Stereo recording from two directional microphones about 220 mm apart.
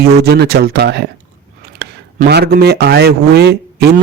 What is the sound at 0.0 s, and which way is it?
A man's voice, 45° right (ahead or behind).